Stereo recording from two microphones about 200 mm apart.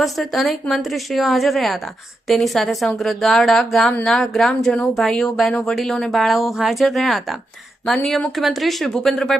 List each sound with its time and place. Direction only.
0.0 s speech: centre (ahead or behind)